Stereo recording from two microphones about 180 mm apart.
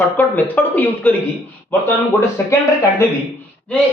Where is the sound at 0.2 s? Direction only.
10° left (ahead or behind).